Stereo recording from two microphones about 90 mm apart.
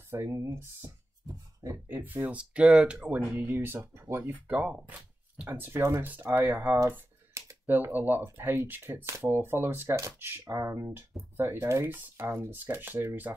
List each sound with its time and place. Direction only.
0.1 s speech: 30° right (ahead or behind)
1.2 s a sound: 40° right (ahead or behind)
1.9 s speech: 20° right (ahead or behind)
3.3 s speech: 25° right (ahead or behind)